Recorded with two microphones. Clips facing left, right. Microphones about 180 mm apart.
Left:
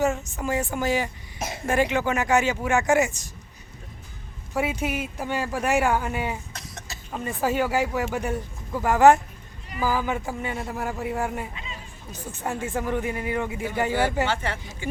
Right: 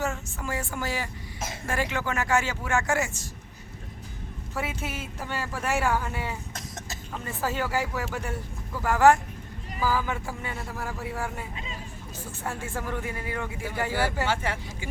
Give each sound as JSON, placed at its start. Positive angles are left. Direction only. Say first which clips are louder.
{"t": 0.0, "sound": "a woman's voice", "louder": "left 7 dB", "side_deg": 20}
{"t": 4.5, "sound": "speech", "louder": "left 7 dB", "side_deg": 15}
{"t": 6.5, "sound": "a sound", "louder": "right 1 dB", "side_deg": -45}
{"t": 7.1, "sound": "a woman's voice", "louder": "left 6 dB", "side_deg": 15}
{"t": 14.3, "sound": "speech", "louder": "left 1 dB", "side_deg": -10}